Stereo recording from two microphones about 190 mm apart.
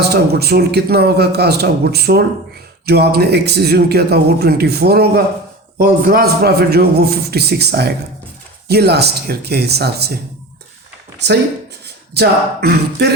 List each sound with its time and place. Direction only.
0.0 s a man's voice: 55° right (ahead or behind)
12.1 s a man's voice: 55° right (ahead or behind)